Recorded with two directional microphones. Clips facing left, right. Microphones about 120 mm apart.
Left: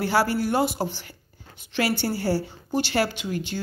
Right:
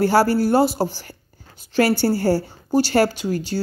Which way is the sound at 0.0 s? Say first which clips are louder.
Right 6 dB; 40° right (ahead or behind).